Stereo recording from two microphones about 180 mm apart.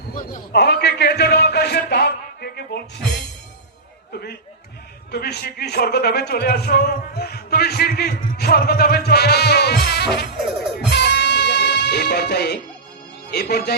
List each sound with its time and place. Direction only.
0.1 s a man's voice: 45° left (ahead or behind)
0.5 s a sound: 65° left (ahead or behind)
4.1 s chatter: 65° left (ahead or behind)
5.1 s a man's voice: 60° left (ahead or behind)
10.9 s music: 70° left (ahead or behind)
13.3 s a man's voice: 60° left (ahead or behind)